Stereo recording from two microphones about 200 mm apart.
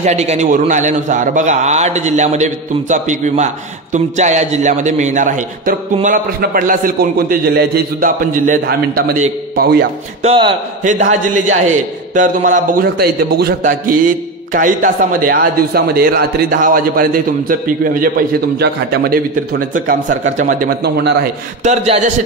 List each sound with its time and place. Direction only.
0.0 s a man's voice: 35° right (ahead or behind); by 9.8 s 50° right (ahead or behind)
10.2 s a man's voice: 25° right (ahead or behind)
10.8 s a man's voice: 40° right (ahead or behind)
18.6 s a man's voice: 55° right (ahead or behind)
21.6 s a man's voice: 35° right (ahead or behind)